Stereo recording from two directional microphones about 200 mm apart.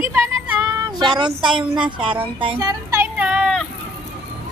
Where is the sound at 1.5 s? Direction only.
25° right (ahead or behind).